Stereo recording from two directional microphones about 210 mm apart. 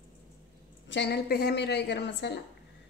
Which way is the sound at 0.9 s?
55° left (ahead or behind).